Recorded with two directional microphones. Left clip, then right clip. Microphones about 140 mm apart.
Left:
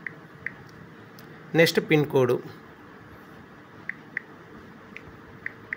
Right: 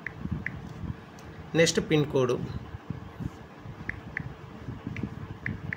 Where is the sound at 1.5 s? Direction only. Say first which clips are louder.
Left 4 dB; 30° left (ahead or behind).